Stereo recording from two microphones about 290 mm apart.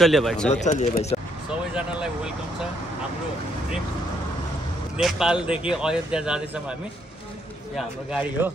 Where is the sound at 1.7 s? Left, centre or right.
Centre.